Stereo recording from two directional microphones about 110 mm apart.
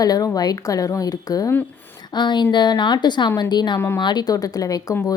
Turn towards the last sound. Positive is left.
turn(degrees=35)  # may be behind; listen again after turning